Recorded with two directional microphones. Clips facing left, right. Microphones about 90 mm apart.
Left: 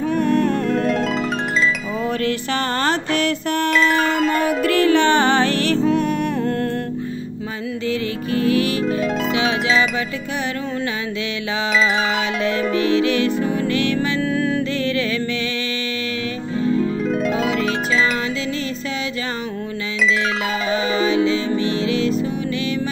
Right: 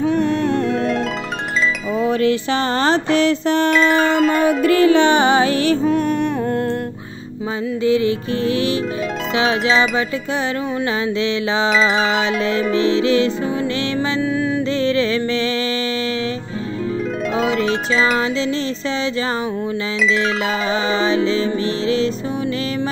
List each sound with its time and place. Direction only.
0.0 s music: centre (ahead or behind)
2.0 s music: 20° right (ahead or behind)
3.3 s a sound: 25° right (ahead or behind)
3.7 s music: centre (ahead or behind)
4.5 s music: 25° right (ahead or behind)
5.8 s music: centre (ahead or behind)
7.8 s music: 20° right (ahead or behind)
9.4 s music: 35° right (ahead or behind)
12.7 s music: 25° right (ahead or behind)
13.9 s music: 5° right (ahead or behind)
14.8 s music: 25° right (ahead or behind)
16.7 s harp: centre (ahead or behind)
20.7 s music: 30° right (ahead or behind)